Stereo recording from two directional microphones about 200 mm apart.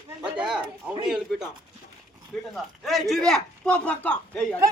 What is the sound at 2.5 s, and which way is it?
Speech, centre (ahead or behind).